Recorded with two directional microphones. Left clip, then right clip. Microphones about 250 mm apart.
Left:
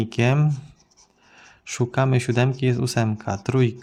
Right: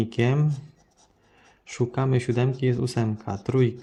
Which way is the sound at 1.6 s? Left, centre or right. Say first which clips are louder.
Left 4 dB; centre.